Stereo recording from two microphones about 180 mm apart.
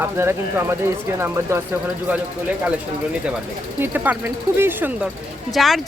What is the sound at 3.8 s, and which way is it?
Speech, 10° right (ahead or behind).